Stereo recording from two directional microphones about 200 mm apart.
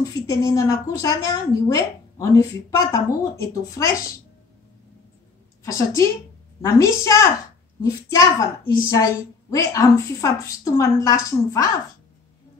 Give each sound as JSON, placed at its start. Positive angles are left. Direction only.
{"t": 0.3, "sound": "a woman's voice", "side_deg": 15}
{"t": 5.6, "sound": "a woman's voice", "side_deg": 15}